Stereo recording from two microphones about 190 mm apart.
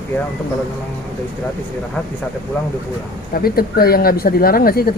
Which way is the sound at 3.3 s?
50° left (ahead or behind).